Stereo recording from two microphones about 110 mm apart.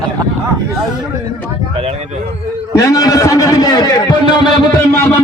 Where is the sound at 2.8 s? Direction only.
35° left (ahead or behind).